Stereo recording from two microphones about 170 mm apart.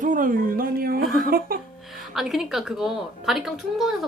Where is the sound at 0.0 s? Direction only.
50° right (ahead or behind).